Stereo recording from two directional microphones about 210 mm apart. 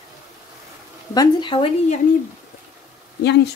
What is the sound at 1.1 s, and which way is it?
Speech, 20° left (ahead or behind).